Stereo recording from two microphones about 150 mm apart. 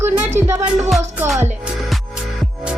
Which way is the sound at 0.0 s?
15° right (ahead or behind).